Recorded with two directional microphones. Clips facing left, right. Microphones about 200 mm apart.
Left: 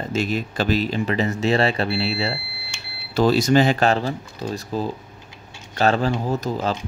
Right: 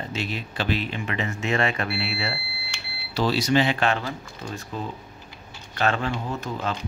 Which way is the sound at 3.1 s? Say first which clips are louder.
Left 5 dB; 50° left (ahead or behind).